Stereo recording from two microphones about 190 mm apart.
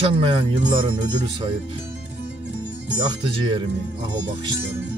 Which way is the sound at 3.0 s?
25° right (ahead or behind).